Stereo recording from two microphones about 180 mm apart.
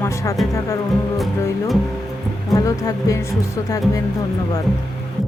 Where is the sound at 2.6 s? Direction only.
20° left (ahead or behind).